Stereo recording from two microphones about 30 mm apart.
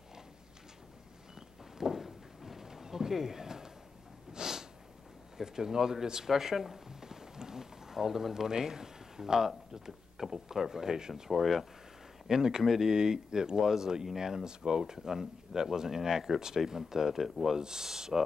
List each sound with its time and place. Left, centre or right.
1.8 s a sound: centre
4.3 s snort: centre
5.4 s speech: centre
6.9 s a sound: centre
8.5 s speech: right
9.7 s a sound: centre
10.2 s speech: centre
10.7 s speech: centre
11.3 s speech: centre
12.3 s speech: centre
12.9 s speech: right
17.6 s speech: right